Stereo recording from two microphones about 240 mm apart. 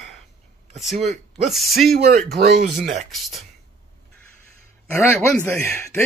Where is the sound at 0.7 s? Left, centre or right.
Centre.